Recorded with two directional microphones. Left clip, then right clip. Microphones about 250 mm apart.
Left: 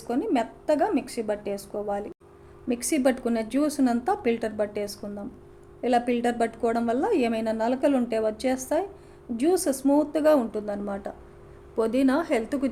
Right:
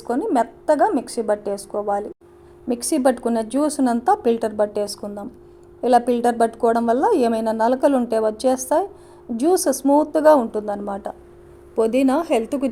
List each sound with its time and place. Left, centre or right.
0.1 s a woman's voice: centre